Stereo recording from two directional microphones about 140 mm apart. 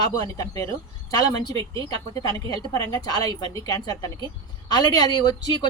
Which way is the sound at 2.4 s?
25° left (ahead or behind).